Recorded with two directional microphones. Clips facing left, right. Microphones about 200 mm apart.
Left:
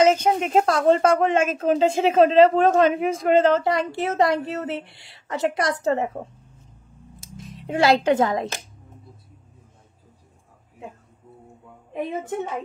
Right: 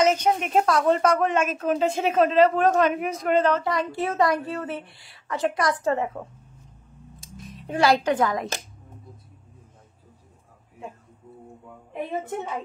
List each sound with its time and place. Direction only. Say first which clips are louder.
0.0 s a woman's voice: left 3 dB; 30° left (ahead or behind)
7.5 s a woman's voice: left 2 dB; 25° left (ahead or behind)